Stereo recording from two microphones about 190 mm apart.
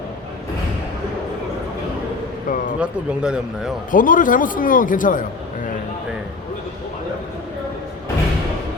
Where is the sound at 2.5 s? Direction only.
45° left (ahead or behind).